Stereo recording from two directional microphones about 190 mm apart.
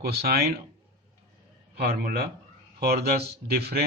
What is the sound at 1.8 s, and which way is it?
A man's voice, 55° right (ahead or behind).